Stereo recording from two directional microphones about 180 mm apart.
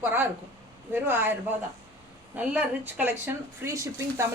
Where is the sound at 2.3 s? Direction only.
10° right (ahead or behind).